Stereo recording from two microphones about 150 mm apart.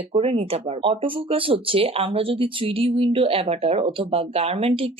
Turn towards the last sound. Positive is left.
turn(degrees=-40)  # may be behind; listen again after turning